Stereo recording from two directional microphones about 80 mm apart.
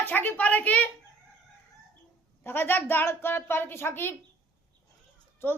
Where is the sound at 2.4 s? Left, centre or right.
Left.